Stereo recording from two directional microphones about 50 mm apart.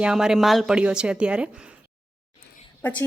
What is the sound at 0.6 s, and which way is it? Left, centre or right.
Speech, centre.